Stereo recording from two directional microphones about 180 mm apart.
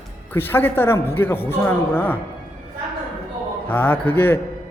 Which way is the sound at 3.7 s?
10° left (ahead or behind).